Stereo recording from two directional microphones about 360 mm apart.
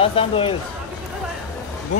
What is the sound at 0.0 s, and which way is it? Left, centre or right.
Speech, centre.